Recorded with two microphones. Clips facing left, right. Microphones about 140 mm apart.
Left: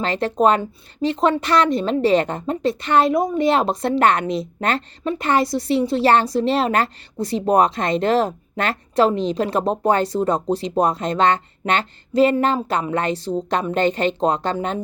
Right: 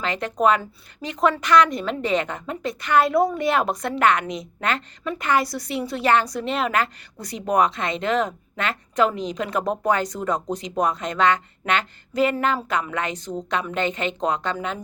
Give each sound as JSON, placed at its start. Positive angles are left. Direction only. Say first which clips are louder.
{"t": 0.0, "sound": "a woman's voice", "louder": "left 4 dB", "side_deg": 30}